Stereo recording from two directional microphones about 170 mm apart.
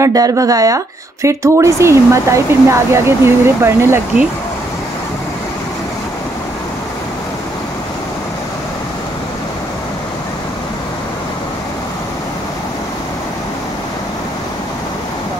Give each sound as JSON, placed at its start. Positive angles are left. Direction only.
{"t": 0.0, "sound": "speech", "side_deg": -20}